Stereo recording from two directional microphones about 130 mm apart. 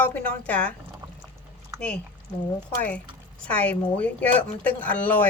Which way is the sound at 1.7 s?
5° left (ahead or behind).